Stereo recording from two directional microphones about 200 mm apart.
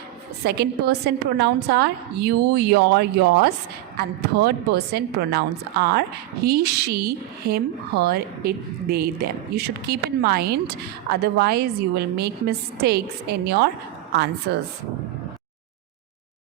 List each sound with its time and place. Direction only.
0.4 s a woman's voice: 55° right (ahead or behind)